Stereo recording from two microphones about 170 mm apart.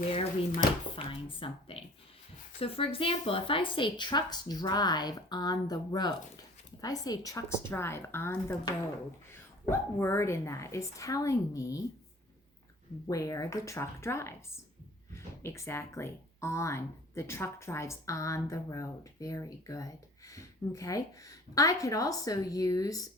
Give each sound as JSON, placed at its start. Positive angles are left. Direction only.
{"t": 0.1, "sound": "speech", "side_deg": 35}
{"t": 13.1, "sound": "speech", "side_deg": 20}